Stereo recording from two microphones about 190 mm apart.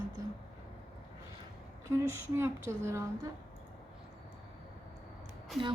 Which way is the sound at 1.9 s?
15° right (ahead or behind).